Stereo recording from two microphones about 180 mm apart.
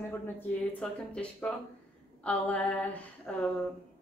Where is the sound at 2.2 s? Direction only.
10° left (ahead or behind).